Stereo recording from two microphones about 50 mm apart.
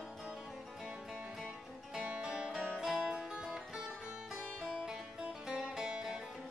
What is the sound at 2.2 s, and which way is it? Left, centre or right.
Music, centre.